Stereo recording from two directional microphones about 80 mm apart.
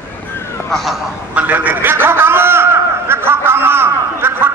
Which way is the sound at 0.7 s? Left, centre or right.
Centre.